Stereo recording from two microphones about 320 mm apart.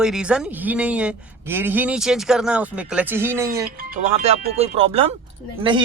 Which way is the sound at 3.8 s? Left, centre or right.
Right.